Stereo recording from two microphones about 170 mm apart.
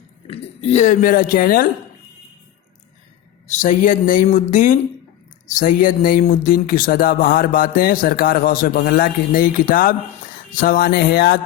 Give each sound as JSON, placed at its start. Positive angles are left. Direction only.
{"t": 0.3, "sound": "speech", "side_deg": 35}
{"t": 3.4, "sound": "speech", "side_deg": 45}